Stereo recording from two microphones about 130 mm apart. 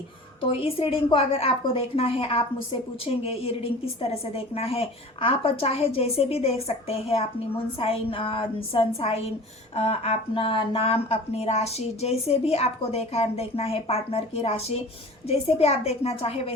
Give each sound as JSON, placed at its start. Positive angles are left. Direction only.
{"t": 0.5, "sound": "a woman's voice", "side_deg": 45}